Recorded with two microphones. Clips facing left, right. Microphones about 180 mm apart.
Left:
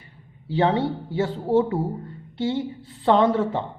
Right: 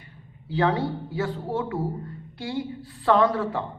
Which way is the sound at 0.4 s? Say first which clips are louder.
Left 3 dB; 25° left (ahead or behind).